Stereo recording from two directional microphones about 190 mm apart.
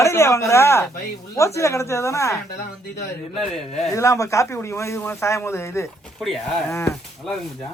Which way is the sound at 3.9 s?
15° left (ahead or behind).